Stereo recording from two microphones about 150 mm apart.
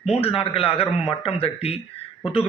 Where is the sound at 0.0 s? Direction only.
40° left (ahead or behind).